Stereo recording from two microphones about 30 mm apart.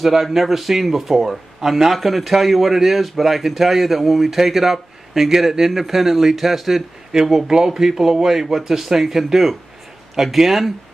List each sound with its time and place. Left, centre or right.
0.0 s a man's voice: centre
7.1 s speech: centre